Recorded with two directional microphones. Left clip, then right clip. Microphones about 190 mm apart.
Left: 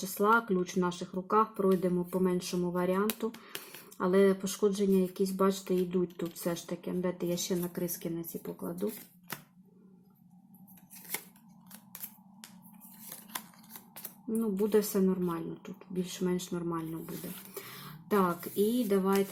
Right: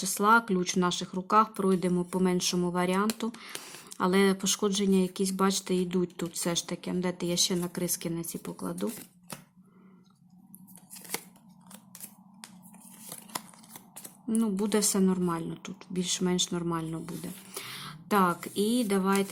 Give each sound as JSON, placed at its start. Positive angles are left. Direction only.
{"t": 0.0, "sound": "speech", "side_deg": -25}
{"t": 3.5, "sound": "speech", "side_deg": 0}
{"t": 3.9, "sound": "speech", "side_deg": -25}
{"t": 13.1, "sound": "scissors", "side_deg": -20}
{"t": 14.3, "sound": "speech", "side_deg": -25}